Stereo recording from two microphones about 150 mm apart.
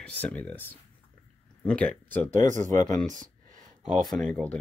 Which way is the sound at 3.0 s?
55° right (ahead or behind).